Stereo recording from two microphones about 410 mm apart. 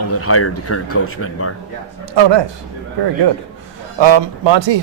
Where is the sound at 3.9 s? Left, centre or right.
Right.